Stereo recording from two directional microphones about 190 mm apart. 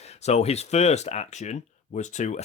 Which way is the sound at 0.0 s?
35° left (ahead or behind).